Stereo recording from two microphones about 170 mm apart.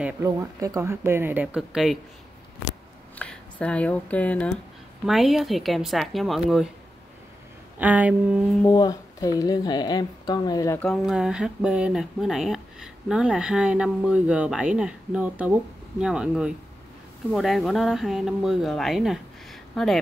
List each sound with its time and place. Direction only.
0.2 s speech: 20° right (ahead or behind); by 2.0 s 5° right (ahead or behind)
3.2 s speech: 5° left (ahead or behind)
7.8 s speech: 10° right (ahead or behind)
8.6 s a woman's voice: 20° left (ahead or behind)
10.9 s speech: 5° right (ahead or behind)